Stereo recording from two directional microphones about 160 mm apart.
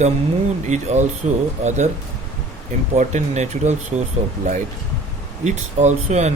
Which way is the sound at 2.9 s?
45° right (ahead or behind).